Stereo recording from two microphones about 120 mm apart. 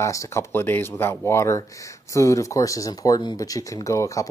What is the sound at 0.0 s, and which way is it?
Speech, 25° left (ahead or behind).